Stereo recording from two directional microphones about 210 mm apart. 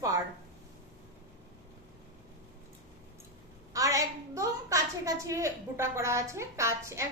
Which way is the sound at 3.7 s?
15° right (ahead or behind).